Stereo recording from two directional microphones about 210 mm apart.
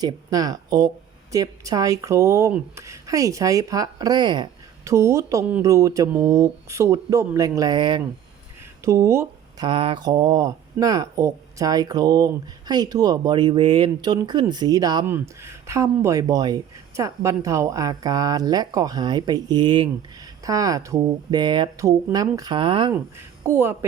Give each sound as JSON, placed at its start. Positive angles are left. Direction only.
{"t": 0.0, "sound": "speech", "side_deg": -20}
{"t": 23.5, "sound": "speech", "side_deg": -10}